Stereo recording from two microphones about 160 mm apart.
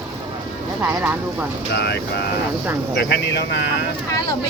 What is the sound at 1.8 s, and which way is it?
Speech, 90° left.